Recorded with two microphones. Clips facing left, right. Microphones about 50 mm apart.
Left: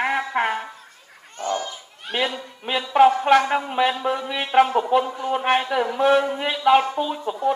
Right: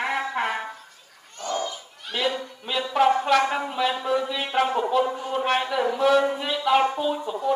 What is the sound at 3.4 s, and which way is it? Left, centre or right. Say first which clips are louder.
A man's voice: left 3 dB; centre.